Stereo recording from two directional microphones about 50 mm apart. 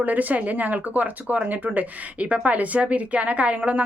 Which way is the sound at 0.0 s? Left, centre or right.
Right.